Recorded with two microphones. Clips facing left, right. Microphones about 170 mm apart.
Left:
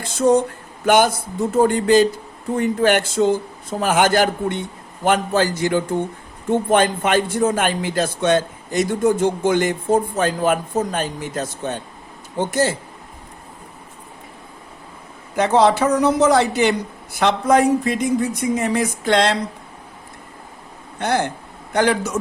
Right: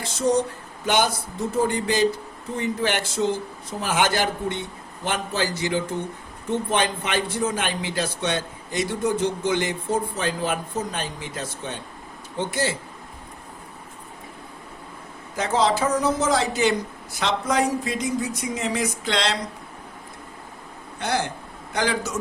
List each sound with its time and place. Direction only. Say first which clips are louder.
0.9 s speech: left 7 dB; 50° left (ahead or behind)
15.4 s speech: left 6 dB; 60° left (ahead or behind)
21.0 s speech: left 5 dB; 55° left (ahead or behind)